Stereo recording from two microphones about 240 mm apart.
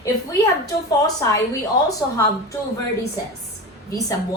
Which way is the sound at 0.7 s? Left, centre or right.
Centre.